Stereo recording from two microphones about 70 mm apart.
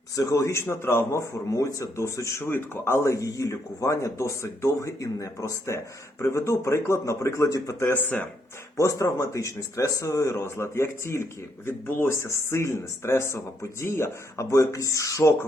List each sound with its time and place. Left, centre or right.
0.2 s speech: left
2.4 s speech: left